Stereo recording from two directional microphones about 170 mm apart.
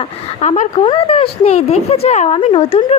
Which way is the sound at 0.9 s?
35° left (ahead or behind).